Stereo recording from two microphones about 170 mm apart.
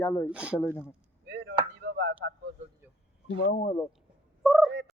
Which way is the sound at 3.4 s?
50° left (ahead or behind).